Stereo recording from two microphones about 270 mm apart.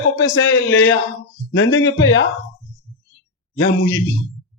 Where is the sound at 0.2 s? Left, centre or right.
Left.